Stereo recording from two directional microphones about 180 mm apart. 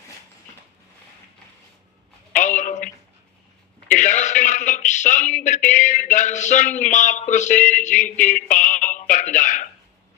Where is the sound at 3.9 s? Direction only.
45° left (ahead or behind).